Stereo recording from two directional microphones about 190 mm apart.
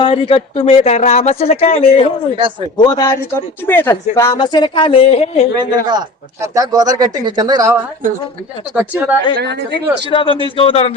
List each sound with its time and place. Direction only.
0.0 s speech: 30° left (ahead or behind)
2.3 s speech: 25° right (ahead or behind)
2.7 s speech: 20° left (ahead or behind)
5.5 s speech: 20° right (ahead or behind)
8.7 s a woman's voice: 10° right (ahead or behind)
10.1 s speech: 30° left (ahead or behind)